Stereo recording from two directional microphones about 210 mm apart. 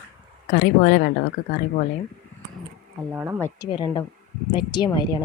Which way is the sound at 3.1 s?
10° right (ahead or behind).